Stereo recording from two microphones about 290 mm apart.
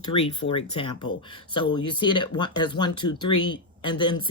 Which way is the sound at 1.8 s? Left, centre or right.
Left.